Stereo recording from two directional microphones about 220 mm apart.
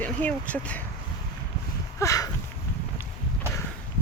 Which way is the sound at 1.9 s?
15° left (ahead or behind).